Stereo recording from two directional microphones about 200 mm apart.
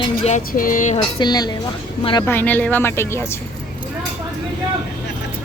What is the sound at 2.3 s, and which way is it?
A woman's voice, 10° left (ahead or behind).